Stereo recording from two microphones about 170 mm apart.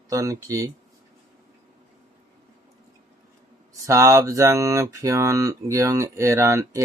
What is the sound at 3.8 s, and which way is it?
Speech, 15° right (ahead or behind).